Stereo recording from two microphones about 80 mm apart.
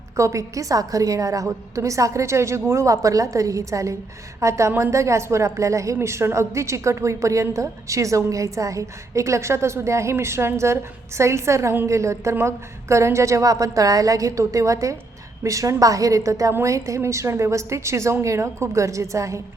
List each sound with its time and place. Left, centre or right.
0.2 s a woman's voice: right